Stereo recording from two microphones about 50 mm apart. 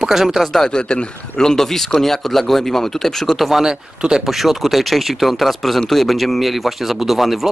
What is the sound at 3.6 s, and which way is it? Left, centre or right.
Speech, centre.